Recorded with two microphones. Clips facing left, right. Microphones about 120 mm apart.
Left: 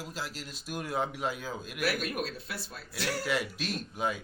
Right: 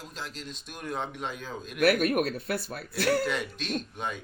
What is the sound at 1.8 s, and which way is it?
Speech, 60° right (ahead or behind).